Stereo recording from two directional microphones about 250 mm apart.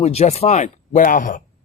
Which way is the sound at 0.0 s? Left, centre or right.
Left.